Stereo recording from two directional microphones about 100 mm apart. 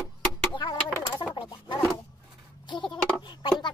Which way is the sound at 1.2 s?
50° left (ahead or behind).